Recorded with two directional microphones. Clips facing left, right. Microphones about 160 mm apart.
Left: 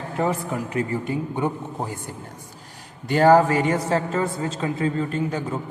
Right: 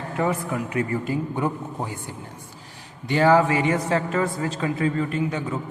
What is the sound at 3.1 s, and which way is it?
A man's voice, 40° left (ahead or behind).